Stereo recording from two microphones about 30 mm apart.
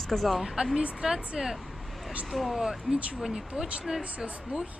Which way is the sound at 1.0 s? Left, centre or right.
Centre.